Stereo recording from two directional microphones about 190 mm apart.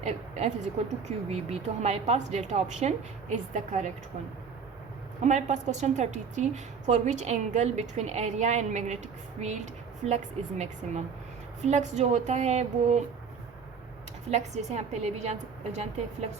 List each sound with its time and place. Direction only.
0.0 s speech: 35° right (ahead or behind)
5.2 s speech: 40° right (ahead or behind)
10.0 s speech: 35° right (ahead or behind)
14.3 s speech: 35° right (ahead or behind)